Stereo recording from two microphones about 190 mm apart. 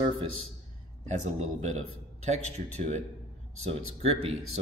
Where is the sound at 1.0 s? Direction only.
40° right (ahead or behind).